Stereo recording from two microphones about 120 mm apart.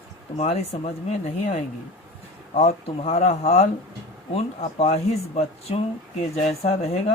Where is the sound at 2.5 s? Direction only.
60° left (ahead or behind).